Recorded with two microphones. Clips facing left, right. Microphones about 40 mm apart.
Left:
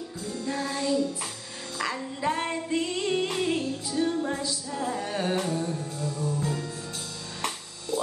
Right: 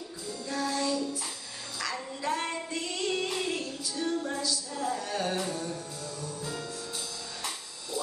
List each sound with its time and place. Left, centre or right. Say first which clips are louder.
0.3 s music: left 1 dB; left
1.8 s female singing: left 5 dB; left